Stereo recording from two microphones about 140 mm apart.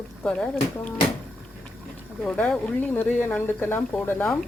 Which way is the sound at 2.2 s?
5° left (ahead or behind).